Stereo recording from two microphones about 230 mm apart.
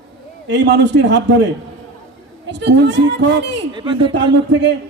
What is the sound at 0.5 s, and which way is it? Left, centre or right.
Speech, right.